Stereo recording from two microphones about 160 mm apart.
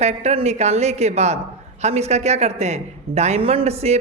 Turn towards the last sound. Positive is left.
turn(degrees=-40)  # may be behind; listen again after turning